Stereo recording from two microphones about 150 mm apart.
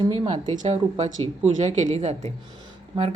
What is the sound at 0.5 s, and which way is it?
Speech, 45° right (ahead or behind).